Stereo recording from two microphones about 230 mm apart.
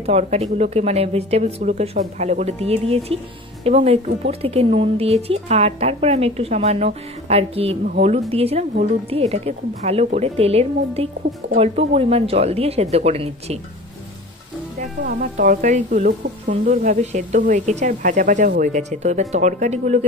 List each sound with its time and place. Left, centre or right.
0.0 s a woman's voice: right
15.0 s speech: right